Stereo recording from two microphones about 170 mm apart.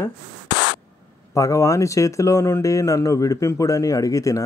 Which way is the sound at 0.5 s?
75° left (ahead or behind).